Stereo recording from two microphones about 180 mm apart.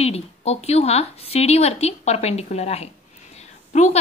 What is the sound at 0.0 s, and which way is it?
A woman's voice, 35° left (ahead or behind).